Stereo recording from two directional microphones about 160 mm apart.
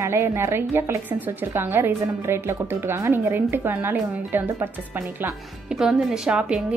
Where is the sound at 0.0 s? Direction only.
15° right (ahead or behind).